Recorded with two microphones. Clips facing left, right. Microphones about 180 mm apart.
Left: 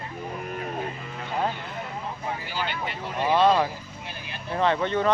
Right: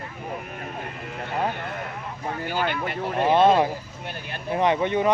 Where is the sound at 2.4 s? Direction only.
55° right (ahead or behind).